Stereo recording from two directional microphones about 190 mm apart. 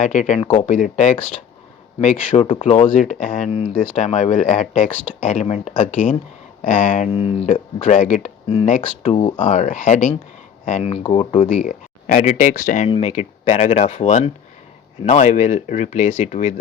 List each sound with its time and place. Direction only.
0.0 s speech: 40° left (ahead or behind)
7.1 s speech: 30° left (ahead or behind)
9.1 s speech: 25° left (ahead or behind)
9.4 s speech: 40° left (ahead or behind)